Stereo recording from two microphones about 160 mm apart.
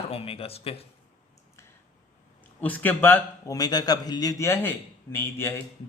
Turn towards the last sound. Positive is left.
turn(degrees=15)  # may be behind; listen again after turning